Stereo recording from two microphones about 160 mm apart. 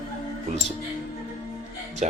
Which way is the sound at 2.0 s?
45° right (ahead or behind).